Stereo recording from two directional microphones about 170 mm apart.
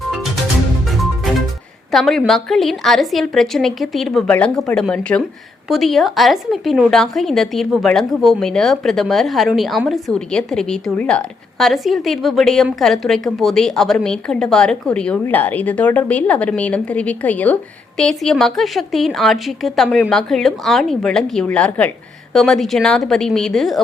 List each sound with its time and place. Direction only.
1.9 s a woman's voice: centre (ahead or behind)